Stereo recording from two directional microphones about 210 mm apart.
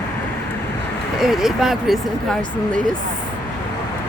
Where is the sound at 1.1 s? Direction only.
Centre (ahead or behind).